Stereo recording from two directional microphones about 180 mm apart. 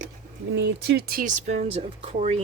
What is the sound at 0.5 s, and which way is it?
Speech, 70° right (ahead or behind).